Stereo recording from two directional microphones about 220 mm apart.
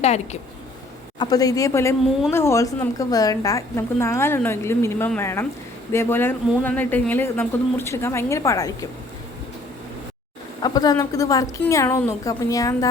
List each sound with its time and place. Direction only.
0.0 s speech: 30° left (ahead or behind)
1.2 s a woman's voice: 15° left (ahead or behind)
10.6 s a woman's voice: 15° left (ahead or behind)